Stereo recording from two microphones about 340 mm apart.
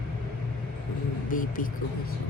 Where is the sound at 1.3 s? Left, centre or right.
Left.